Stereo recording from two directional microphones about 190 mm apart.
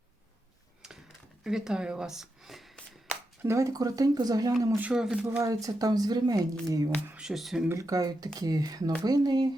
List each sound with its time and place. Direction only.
1.5 s speech: centre (ahead or behind)
3.4 s speech: 15° right (ahead or behind)
5.4 s speech: 20° right (ahead or behind)
7.1 s speech: 5° right (ahead or behind)
7.7 s speech: 15° right (ahead or behind)